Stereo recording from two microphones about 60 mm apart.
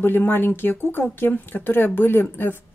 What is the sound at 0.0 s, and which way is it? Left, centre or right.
Speech, left.